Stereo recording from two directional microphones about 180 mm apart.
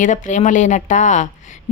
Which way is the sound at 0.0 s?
45° left (ahead or behind).